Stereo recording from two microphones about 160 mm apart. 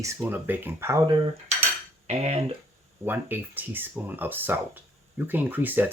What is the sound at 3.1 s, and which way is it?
Speech, 10° right (ahead or behind).